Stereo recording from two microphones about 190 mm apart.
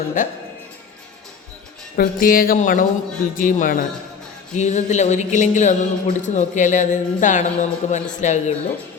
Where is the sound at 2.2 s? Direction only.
50° left (ahead or behind).